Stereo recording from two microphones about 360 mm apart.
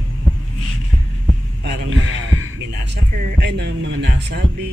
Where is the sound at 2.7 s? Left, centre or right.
Right.